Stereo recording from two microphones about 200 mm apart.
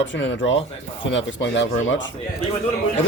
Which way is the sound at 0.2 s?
65° left (ahead or behind).